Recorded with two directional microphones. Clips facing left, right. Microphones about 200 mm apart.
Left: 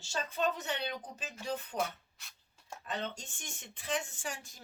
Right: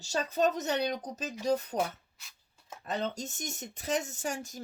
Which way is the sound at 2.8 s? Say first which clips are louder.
Right 6 dB; 40° right (ahead or behind).